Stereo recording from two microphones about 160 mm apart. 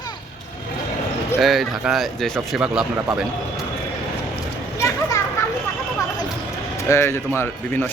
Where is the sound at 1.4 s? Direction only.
Centre (ahead or behind).